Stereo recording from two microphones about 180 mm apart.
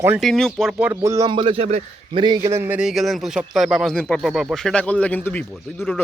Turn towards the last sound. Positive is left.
turn(degrees=0)  # may be behind; listen again after turning